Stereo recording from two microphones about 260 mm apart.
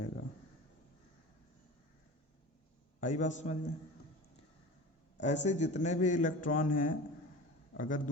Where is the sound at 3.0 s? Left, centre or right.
Left.